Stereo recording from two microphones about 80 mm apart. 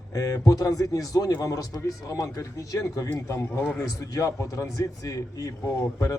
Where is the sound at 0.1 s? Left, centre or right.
Left.